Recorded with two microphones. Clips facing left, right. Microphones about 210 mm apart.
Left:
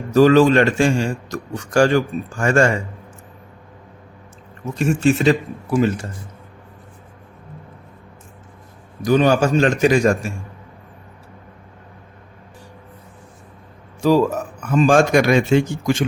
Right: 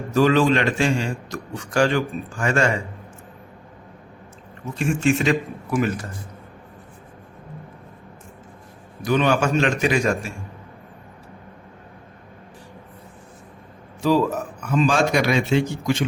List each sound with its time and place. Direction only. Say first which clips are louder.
0.1 s a man's voice: left 5 dB; 40° left (ahead or behind)
4.8 s a man's voice: left 4 dB; 40° left (ahead or behind)
9.0 s a man's voice: left 4 dB; 40° left (ahead or behind)
14.7 s a man's voice: left 5 dB; 50° left (ahead or behind)